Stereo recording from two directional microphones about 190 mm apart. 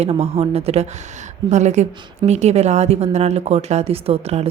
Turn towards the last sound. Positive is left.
turn(degrees=-30)  # may be behind; listen again after turning